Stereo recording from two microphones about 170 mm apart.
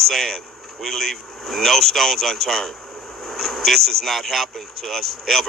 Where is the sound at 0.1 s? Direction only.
Centre (ahead or behind).